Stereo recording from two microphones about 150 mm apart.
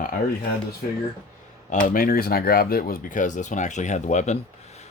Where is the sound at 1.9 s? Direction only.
70° left (ahead or behind).